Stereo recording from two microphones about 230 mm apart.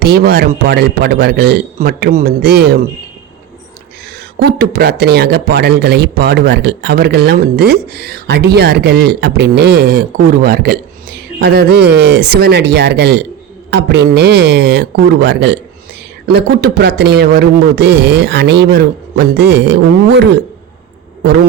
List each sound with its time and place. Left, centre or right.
0.0 s speech: right
4.4 s speech: right